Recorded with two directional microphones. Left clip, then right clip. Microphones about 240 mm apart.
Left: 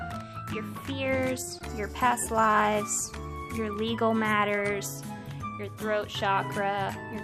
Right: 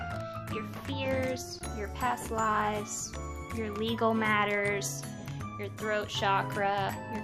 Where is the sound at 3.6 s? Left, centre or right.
Centre.